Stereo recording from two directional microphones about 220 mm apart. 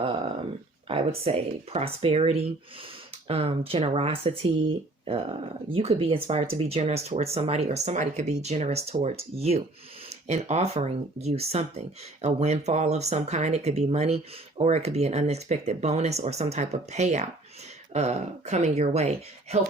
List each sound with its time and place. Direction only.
0.9 s speech: 25° right (ahead or behind)